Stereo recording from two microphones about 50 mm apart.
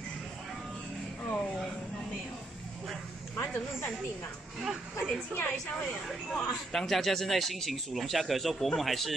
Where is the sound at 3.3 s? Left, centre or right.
Left.